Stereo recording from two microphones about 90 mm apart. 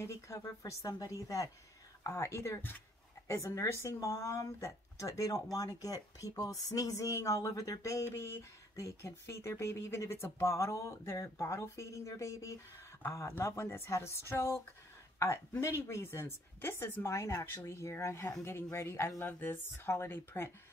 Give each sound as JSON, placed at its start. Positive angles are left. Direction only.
{"t": 0.0, "sound": "speech", "side_deg": 30}